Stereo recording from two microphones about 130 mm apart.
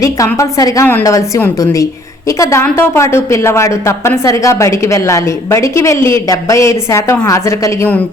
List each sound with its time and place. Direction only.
0.3 s a woman's voice: 25° left (ahead or behind)